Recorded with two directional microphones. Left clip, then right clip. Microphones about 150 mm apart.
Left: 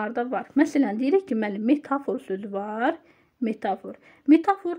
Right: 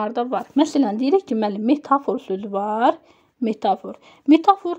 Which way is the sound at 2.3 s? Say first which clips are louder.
Right 7 dB; 40° right (ahead or behind).